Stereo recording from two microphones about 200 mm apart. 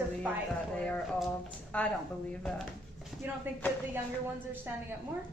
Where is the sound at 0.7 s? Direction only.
5° left (ahead or behind).